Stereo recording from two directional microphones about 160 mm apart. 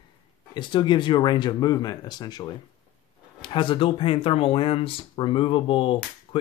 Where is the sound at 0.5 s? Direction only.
30° left (ahead or behind).